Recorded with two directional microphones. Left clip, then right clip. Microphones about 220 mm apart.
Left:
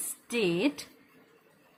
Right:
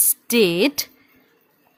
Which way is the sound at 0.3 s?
50° right (ahead or behind).